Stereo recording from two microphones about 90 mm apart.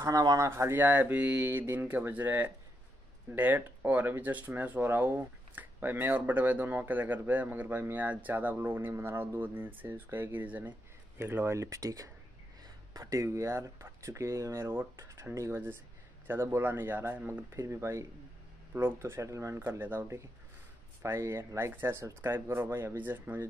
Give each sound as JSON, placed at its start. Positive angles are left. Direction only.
{"t": 0.0, "sound": "speech", "side_deg": -40}
{"t": 0.5, "sound": "speech", "side_deg": -25}
{"t": 17.5, "sound": "speech", "side_deg": -30}